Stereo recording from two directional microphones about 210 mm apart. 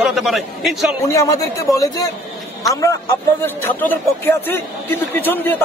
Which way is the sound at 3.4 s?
10° left (ahead or behind).